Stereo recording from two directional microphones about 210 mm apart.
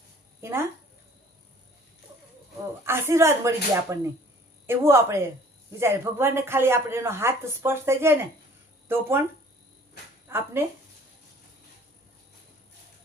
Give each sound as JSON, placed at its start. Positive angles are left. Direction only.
{"t": 0.4, "sound": "speech", "side_deg": -10}
{"t": 2.8, "sound": "speech", "side_deg": -10}
{"t": 10.2, "sound": "speech", "side_deg": -10}